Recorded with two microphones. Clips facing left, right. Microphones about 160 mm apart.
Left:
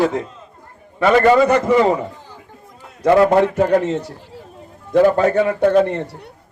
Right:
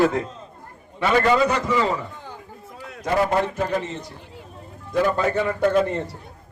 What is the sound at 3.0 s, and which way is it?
A man's voice, 75° left (ahead or behind).